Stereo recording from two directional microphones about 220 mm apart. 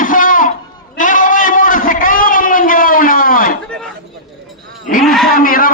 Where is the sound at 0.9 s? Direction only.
35° left (ahead or behind).